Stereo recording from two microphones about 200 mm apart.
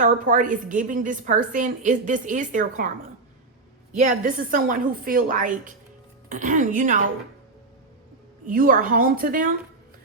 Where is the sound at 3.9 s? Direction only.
40° right (ahead or behind).